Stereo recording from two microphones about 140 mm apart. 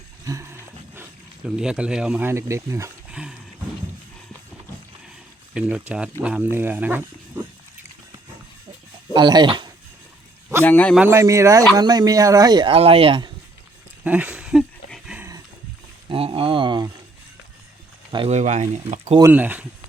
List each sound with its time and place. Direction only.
0.3 s wild animals: 20° right (ahead or behind)
1.5 s speech: 5° right (ahead or behind)
2.2 s speech: 20° right (ahead or behind)
3.1 s dog: 5° right (ahead or behind)
5.5 s speech: 5° right (ahead or behind)
9.1 s speech: 30° right (ahead or behind)
10.6 s a man's voice: 10° left (ahead or behind)
11.1 s speech: 20° right (ahead or behind); by 13.3 s 35° right (ahead or behind)
14.0 s a sound: 10° right (ahead or behind)
14.8 s dog: centre (ahead or behind)
16.0 s a sound: 45° right (ahead or behind)
18.3 s speech: 55° right (ahead or behind)
19.3 s speech: 10° right (ahead or behind)